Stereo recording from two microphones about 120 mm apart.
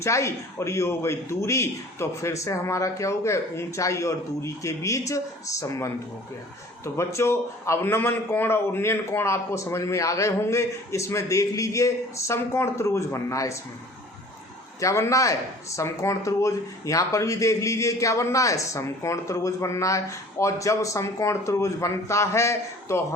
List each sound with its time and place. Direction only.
0.0 s speech: 25° left (ahead or behind)
14.8 s speech: 25° left (ahead or behind)